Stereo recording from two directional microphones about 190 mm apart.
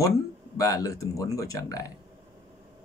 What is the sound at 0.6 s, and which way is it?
Speech, 15° left (ahead or behind).